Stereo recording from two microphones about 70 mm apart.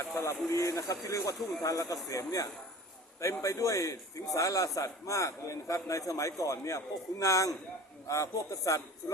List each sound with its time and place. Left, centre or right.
0.2 s a man's voice: left